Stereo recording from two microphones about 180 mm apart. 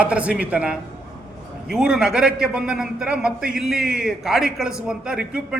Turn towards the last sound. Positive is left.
turn(degrees=-5)  # may be behind; listen again after turning